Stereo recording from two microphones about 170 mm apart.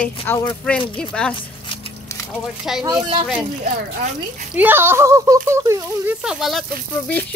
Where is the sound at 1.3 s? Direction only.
30° left (ahead or behind).